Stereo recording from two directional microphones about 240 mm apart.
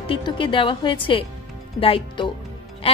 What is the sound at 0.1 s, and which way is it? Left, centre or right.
A woman's voice, left.